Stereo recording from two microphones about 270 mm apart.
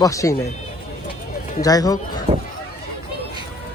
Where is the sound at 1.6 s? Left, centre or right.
Centre.